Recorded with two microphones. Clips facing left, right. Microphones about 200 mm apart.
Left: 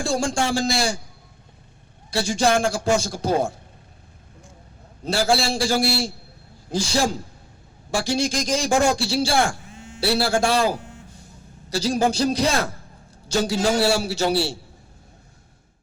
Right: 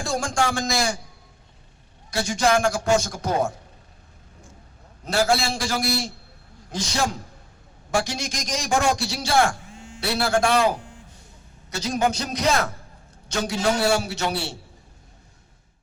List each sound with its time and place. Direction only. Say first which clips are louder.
0.0 s a man's voice: left 2 dB; 30° left (ahead or behind)
2.0 s a man's voice: left 1 dB; 30° left (ahead or behind)
5.0 s a man's voice: left 1 dB; 30° left (ahead or behind)